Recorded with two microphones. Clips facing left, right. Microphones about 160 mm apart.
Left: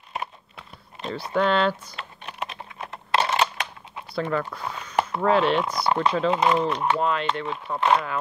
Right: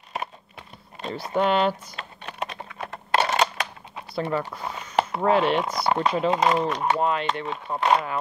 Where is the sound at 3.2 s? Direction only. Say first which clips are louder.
Right 1 dB; 40° right (ahead or behind).